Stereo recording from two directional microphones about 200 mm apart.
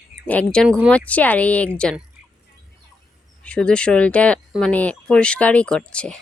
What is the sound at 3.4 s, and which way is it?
Speech, 5° left (ahead or behind).